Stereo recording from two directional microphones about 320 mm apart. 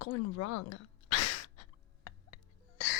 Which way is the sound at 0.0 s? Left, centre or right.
Left.